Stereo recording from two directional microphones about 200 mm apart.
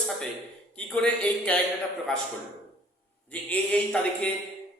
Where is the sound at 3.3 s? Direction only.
5° left (ahead or behind).